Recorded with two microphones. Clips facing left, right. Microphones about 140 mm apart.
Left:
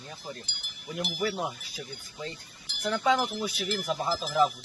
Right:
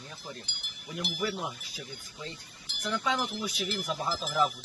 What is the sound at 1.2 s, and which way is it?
Speech, 75° left (ahead or behind).